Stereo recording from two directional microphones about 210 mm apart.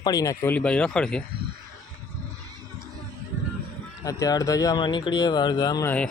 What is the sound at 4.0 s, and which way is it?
Speech, 15° left (ahead or behind).